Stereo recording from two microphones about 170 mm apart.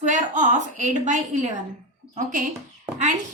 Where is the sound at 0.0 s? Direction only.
45° right (ahead or behind).